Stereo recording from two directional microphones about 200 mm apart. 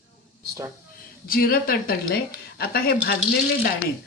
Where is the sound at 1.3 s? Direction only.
45° left (ahead or behind).